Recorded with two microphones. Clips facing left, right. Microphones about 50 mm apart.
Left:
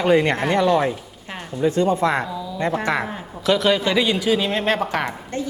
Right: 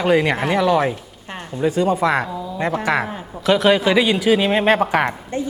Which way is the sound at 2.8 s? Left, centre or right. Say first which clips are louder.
Right 3 dB; centre.